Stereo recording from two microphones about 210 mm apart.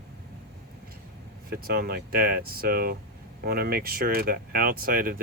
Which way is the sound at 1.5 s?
45° right (ahead or behind).